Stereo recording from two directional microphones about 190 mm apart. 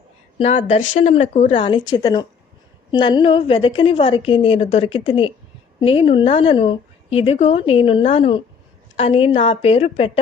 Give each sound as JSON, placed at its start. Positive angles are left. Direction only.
{"t": 0.3, "sound": "a woman's voice", "side_deg": 30}